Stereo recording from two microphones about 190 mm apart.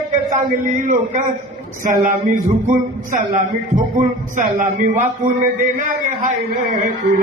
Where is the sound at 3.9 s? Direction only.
50° right (ahead or behind).